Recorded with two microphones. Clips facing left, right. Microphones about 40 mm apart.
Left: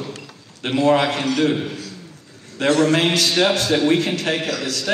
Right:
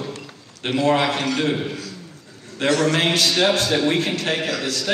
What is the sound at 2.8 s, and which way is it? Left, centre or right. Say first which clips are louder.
Speech: left 2 dB; right.